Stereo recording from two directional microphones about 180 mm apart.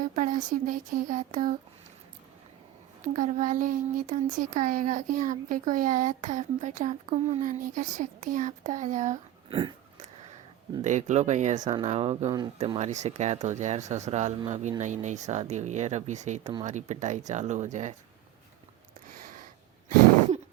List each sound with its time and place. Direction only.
0.0 s speech: 45° right (ahead or behind)
3.0 s speech: 40° right (ahead or behind)
9.5 s a sound: 30° right (ahead or behind)
10.8 s speech: 40° right (ahead or behind)